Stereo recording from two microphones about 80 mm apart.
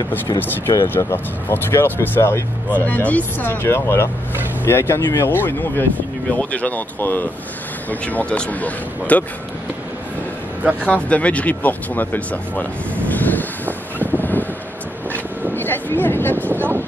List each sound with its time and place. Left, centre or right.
0.4 s speech: left
2.8 s speech: centre
10.6 s speech: centre
10.9 s music: centre
15.5 s speech: left